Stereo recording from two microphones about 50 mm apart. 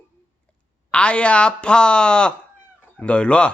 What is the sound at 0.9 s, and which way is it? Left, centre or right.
A man's voice, left.